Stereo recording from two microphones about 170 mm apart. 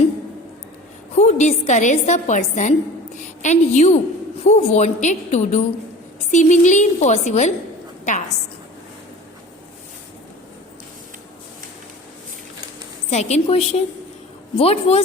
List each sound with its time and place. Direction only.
1.1 s a woman's voice: 40° left (ahead or behind)
13.1 s a woman's voice: 40° left (ahead or behind)